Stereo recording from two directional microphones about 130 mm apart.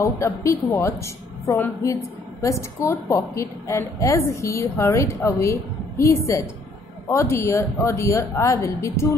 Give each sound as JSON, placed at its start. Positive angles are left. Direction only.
{"t": 0.0, "sound": "a woman's voice", "side_deg": 25}